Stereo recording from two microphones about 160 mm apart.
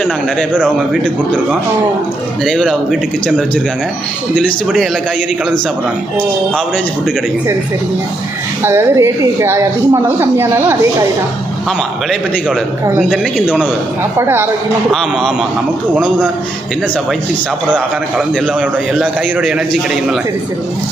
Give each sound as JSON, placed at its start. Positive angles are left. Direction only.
{"t": 2.5, "sound": "a man's voice", "side_deg": 5}
{"t": 8.6, "sound": "a woman's voice", "side_deg": -15}
{"t": 13.0, "sound": "a man's voice", "side_deg": -5}
{"t": 14.9, "sound": "a man's voice", "side_deg": 0}
{"t": 18.3, "sound": "a man's voice", "side_deg": -5}